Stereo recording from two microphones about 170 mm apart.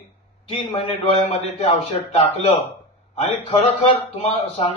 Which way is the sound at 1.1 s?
35° left (ahead or behind).